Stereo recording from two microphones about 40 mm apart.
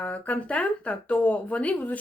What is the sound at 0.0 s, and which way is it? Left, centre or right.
Speech, left.